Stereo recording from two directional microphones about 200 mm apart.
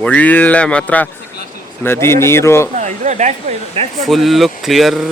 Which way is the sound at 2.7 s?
35° right (ahead or behind).